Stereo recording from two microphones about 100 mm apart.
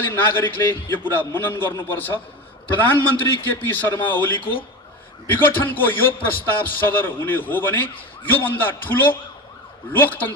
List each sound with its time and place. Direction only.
0.0 s a man's voice: 20° left (ahead or behind)